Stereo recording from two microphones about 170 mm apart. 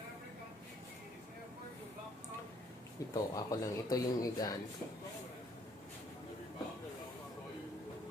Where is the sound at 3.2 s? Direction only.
20° left (ahead or behind).